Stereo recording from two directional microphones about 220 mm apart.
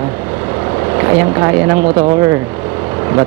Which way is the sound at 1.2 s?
15° right (ahead or behind).